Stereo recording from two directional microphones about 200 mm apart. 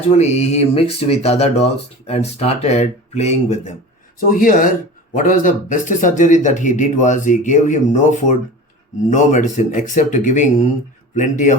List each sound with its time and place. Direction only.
0.2 s speech: 35° left (ahead or behind)